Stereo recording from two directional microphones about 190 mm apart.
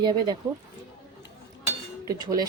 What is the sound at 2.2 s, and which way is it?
Speech, 20° right (ahead or behind).